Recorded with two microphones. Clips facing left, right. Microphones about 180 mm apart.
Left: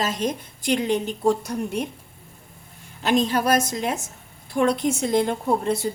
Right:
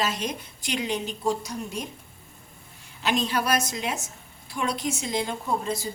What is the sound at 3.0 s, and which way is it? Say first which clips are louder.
A woman's voice: left 5 dB; 45° left (ahead or behind).